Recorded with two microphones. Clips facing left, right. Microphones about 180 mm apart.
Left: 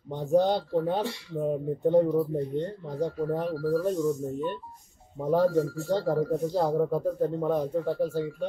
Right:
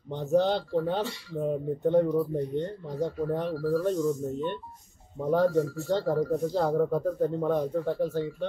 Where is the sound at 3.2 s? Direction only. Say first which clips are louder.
Even; 5° left (ahead or behind).